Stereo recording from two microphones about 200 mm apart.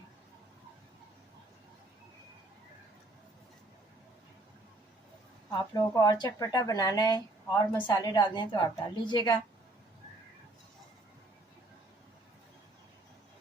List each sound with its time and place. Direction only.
5.5 s a woman's voice: 20° left (ahead or behind)